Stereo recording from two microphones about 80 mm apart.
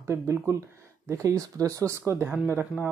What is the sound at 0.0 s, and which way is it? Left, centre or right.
Speech, right.